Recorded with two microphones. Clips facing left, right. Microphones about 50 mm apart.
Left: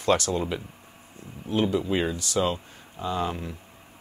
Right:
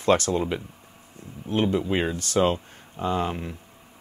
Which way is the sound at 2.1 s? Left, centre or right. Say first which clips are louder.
Right 4 dB; right.